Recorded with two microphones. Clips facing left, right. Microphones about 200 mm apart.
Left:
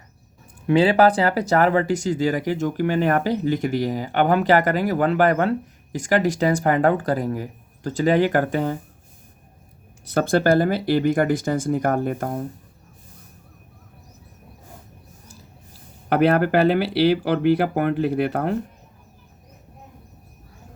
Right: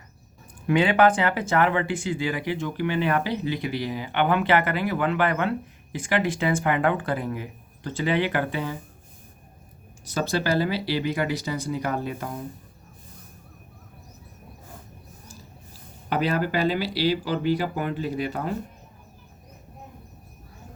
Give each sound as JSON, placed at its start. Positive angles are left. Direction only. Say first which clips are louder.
{"t": 0.7, "sound": "speech", "louder": "left 3 dB", "side_deg": 35}
{"t": 10.1, "sound": "speech", "louder": "left 7 dB", "side_deg": 55}
{"t": 16.0, "sound": "speech", "louder": "left 7 dB", "side_deg": 60}